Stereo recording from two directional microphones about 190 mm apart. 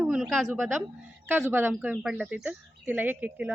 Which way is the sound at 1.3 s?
10° right (ahead or behind).